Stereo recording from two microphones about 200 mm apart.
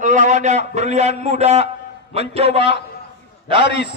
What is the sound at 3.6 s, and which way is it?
Speech, 60° left (ahead or behind).